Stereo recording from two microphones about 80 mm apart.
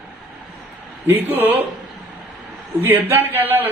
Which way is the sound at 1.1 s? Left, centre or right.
Right.